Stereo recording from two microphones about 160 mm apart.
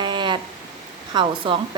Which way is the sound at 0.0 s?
30° right (ahead or behind).